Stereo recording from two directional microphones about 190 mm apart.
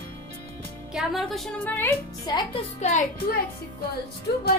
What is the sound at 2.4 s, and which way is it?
Speech, 30° left (ahead or behind).